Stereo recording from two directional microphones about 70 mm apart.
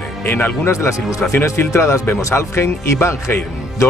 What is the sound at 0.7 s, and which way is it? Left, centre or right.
Speech, left.